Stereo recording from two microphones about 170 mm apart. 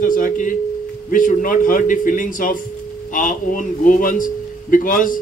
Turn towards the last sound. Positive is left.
turn(degrees=55)  # may be behind; listen again after turning